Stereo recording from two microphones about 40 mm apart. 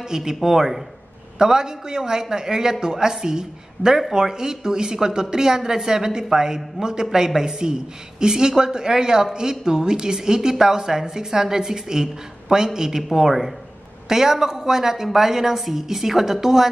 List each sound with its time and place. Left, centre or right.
0.0 s a man's voice: centre